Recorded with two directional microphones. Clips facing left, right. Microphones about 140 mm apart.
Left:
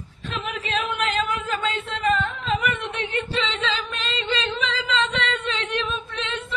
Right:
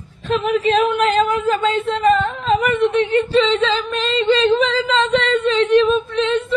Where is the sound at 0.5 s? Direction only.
40° right (ahead or behind).